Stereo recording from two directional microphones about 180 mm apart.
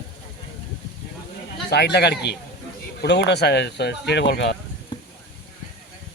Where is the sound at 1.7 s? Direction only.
70° left (ahead or behind).